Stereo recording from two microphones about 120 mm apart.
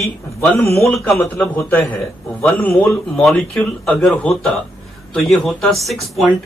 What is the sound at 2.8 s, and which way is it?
Speech, 10° left (ahead or behind).